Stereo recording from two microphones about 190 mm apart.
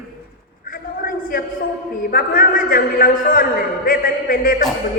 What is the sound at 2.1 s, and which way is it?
A man's voice, 45° left (ahead or behind).